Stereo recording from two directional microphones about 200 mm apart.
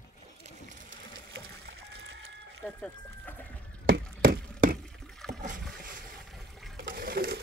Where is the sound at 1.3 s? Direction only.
65° right (ahead or behind).